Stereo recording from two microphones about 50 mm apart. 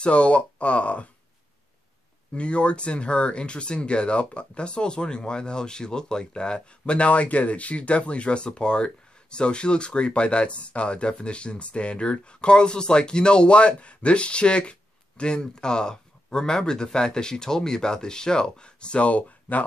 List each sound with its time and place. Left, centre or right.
0.0 s speech: left
2.3 s speech: left